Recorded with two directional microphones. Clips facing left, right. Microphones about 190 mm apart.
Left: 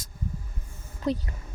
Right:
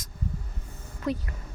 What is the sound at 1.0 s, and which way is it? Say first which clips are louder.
Speech: left 2 dB; 35° left (ahead or behind).